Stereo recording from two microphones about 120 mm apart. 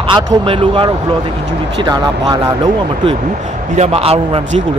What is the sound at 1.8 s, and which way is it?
Speech, 35° right (ahead or behind).